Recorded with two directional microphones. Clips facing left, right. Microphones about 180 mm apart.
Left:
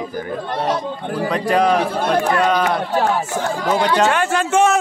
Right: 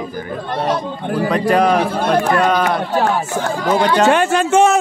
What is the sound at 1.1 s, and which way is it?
A man's voice, 60° right (ahead or behind).